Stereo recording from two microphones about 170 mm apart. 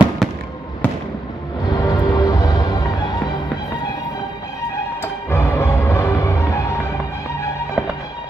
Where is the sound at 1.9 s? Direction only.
20° left (ahead or behind).